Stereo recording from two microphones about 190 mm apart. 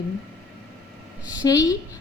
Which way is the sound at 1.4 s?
20° left (ahead or behind).